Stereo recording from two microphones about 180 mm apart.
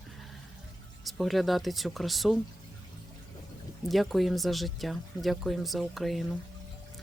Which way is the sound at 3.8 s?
Centre (ahead or behind).